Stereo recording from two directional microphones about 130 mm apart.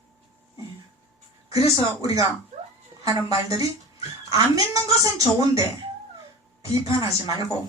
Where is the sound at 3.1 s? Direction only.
45° left (ahead or behind).